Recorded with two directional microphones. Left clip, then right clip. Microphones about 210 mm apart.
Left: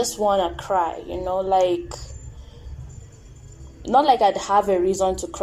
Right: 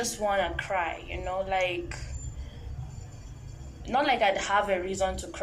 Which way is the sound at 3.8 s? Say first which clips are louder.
Left 8 dB; 25° left (ahead or behind).